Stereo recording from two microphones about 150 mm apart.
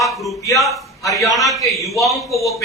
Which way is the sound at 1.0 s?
20° left (ahead or behind).